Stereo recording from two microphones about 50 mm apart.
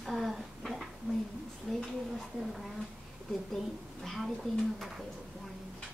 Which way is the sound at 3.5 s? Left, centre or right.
Centre.